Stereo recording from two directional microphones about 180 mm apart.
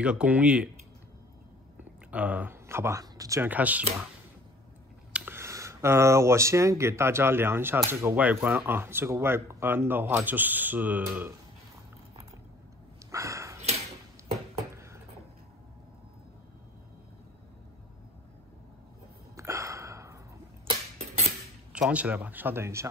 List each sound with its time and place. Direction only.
0.0 s speech: 5° right (ahead or behind)
2.0 s speech: 10° right (ahead or behind)
5.1 s speech: 10° right (ahead or behind)
13.1 s a sound: 15° right (ahead or behind)
19.3 s a sound: 15° right (ahead or behind)
21.7 s speech: 5° right (ahead or behind)